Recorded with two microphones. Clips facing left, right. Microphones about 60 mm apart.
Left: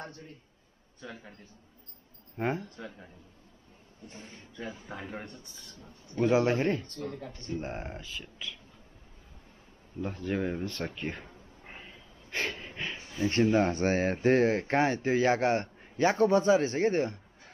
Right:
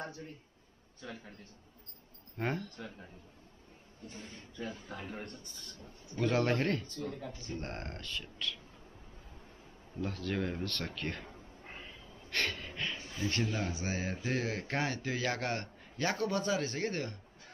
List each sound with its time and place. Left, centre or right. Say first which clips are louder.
1.0 s speech: left 2 dB; centre
4.1 s speech: left 1 dB; centre
5.2 s speech: left 1 dB; centre
9.9 s speech: left 2 dB; centre
10.2 s speech: left 5 dB; centre
11.6 s wheeze: left 1 dB; centre
12.5 s speech: left 1 dB; centre
13.7 s speech: left 10 dB; left